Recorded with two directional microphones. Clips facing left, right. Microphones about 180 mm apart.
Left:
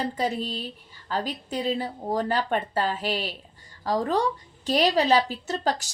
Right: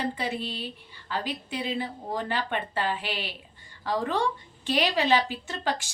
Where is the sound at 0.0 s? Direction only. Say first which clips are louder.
Left 3 dB; 40° left (ahead or behind).